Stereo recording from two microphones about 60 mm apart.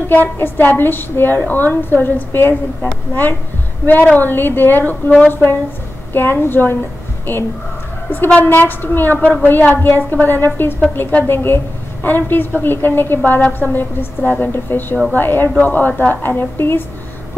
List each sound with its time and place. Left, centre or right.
0.1 s a woman's voice: left
8.4 s a woman's voice: left